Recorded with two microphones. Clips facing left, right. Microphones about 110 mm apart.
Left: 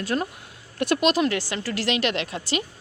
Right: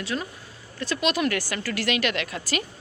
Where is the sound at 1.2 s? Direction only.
25° left (ahead or behind).